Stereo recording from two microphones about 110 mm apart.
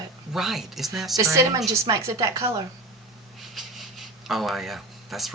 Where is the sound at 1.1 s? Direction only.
30° right (ahead or behind).